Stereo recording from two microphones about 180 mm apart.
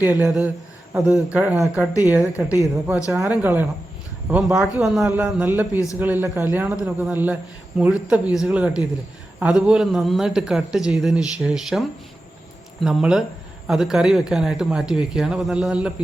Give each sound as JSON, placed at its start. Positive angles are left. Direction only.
{"t": 0.0, "sound": "speech", "side_deg": -10}
{"t": 1.3, "sound": "a man's voice", "side_deg": -10}
{"t": 5.7, "sound": "a man's voice", "side_deg": 20}
{"t": 6.0, "sound": "a man's voice", "side_deg": -10}